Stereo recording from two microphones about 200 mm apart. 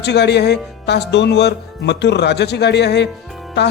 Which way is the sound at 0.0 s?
60° left (ahead or behind).